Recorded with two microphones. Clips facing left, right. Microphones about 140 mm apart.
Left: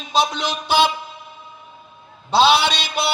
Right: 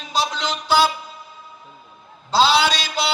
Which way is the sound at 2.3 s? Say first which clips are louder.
Left 2 dB; 60° left (ahead or behind).